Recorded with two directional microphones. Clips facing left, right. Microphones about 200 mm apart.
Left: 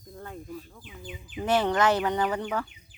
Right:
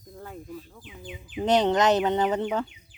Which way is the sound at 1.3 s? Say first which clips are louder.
Right 3 dB; 20° right (ahead or behind).